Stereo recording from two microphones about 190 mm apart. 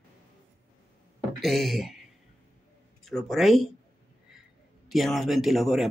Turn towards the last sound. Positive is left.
turn(degrees=0)  # may be behind; listen again after turning